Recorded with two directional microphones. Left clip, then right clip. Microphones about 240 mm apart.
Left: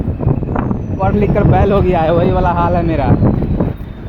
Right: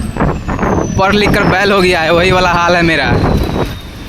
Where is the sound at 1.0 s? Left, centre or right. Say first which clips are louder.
Right 3 dB; right.